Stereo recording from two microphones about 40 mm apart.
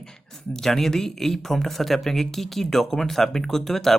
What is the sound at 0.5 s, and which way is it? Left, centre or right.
Speech, centre.